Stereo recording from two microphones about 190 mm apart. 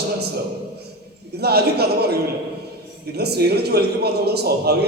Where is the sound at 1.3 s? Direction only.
60° right (ahead or behind).